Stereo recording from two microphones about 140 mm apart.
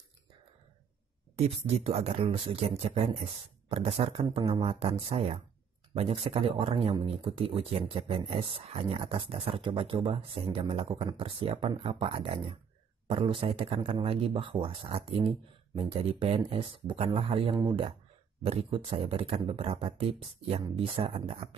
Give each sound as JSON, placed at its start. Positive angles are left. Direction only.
{"t": 1.3, "sound": "speech", "side_deg": -45}